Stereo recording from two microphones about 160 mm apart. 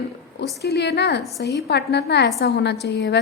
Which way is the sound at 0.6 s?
90° left.